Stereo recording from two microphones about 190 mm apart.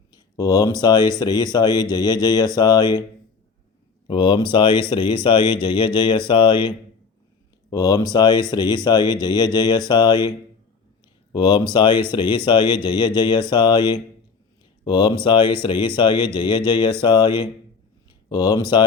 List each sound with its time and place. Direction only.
0.1 s speech: 20° left (ahead or behind)
4.0 s speech: 25° left (ahead or behind)